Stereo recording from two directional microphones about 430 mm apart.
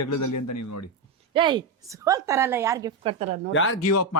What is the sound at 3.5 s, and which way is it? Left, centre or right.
Speech, left.